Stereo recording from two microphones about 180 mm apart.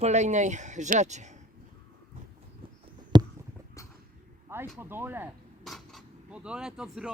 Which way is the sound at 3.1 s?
25° right (ahead or behind).